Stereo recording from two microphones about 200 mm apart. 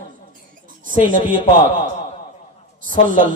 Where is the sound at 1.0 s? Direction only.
40° right (ahead or behind).